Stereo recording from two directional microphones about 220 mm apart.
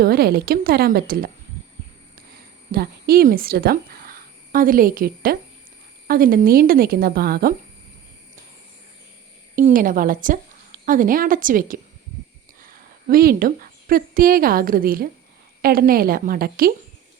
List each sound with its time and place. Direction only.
0.0 s a woman's voice: 45° right (ahead or behind)
2.7 s a woman's voice: 45° right (ahead or behind)
9.6 s a woman's voice: 40° right (ahead or behind)